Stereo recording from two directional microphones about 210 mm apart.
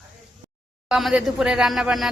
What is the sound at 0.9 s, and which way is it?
Speech, centre (ahead or behind).